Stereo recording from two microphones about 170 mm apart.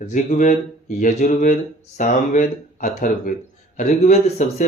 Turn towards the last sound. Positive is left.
turn(degrees=45)  # may be behind; listen again after turning